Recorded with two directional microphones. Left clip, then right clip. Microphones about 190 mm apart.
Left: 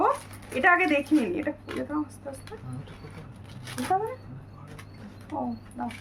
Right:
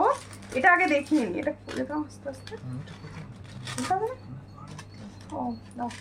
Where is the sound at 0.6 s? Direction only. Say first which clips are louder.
Right 1 dB; 10° left (ahead or behind).